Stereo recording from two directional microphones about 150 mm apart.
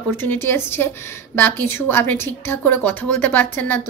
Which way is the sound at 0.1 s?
15° left (ahead or behind).